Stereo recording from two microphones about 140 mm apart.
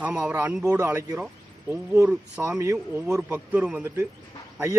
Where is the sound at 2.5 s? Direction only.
25° right (ahead or behind).